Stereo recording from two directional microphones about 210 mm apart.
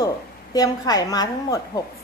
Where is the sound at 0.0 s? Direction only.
15° left (ahead or behind).